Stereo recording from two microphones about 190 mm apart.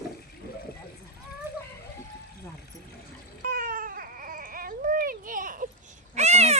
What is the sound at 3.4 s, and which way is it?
Baby cry, 50° right (ahead or behind).